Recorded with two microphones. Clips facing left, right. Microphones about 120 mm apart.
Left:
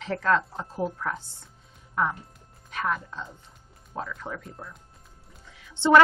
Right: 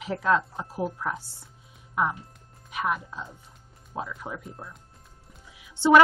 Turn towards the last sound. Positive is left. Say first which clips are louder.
# even
turn(degrees=-10)  # may be behind; listen again after turning